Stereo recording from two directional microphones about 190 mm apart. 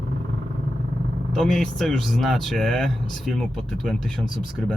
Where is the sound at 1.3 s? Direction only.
Centre (ahead or behind).